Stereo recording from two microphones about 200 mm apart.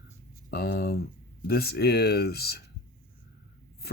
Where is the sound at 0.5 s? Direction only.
55° left (ahead or behind).